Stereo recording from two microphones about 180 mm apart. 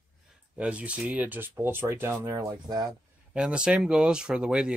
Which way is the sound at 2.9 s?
5° right (ahead or behind).